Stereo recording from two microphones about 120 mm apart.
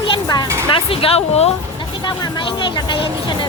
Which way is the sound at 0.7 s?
50° left (ahead or behind).